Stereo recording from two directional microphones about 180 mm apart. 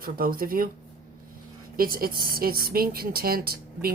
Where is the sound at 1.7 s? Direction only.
55° right (ahead or behind).